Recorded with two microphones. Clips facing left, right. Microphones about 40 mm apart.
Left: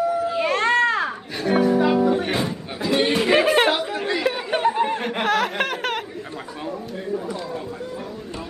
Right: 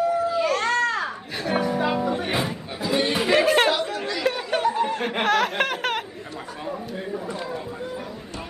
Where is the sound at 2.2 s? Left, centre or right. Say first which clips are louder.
Left 1 dB; centre.